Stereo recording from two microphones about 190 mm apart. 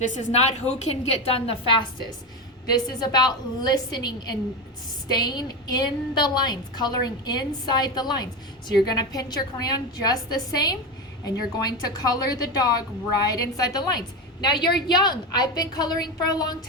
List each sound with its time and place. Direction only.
0.0 s a woman's voice: 40° left (ahead or behind); by 16.6 s 20° left (ahead or behind)